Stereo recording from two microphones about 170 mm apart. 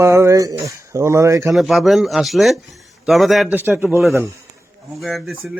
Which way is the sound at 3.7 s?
10° right (ahead or behind).